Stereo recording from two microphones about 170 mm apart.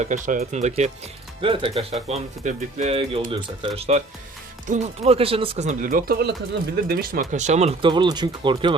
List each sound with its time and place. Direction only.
0.0 s speech: 50° right (ahead or behind)
1.4 s speech: 30° right (ahead or behind)